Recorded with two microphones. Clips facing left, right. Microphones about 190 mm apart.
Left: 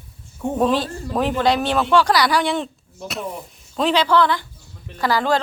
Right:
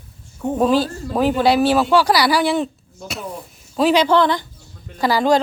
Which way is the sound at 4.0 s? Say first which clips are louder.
Right 2 dB; 20° right (ahead or behind).